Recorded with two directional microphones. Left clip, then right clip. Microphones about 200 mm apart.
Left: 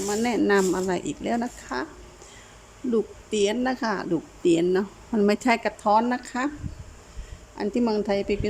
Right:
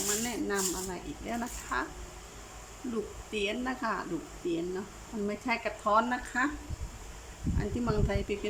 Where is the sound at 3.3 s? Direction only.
30° left (ahead or behind).